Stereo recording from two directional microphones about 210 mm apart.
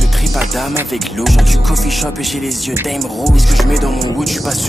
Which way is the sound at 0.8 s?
Centre (ahead or behind).